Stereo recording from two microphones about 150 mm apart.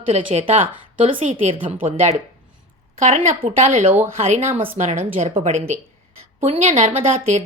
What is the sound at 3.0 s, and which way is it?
A woman's voice, 45° right (ahead or behind).